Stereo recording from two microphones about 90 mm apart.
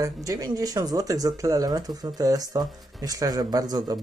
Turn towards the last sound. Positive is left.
turn(degrees=-50)  # may be behind; listen again after turning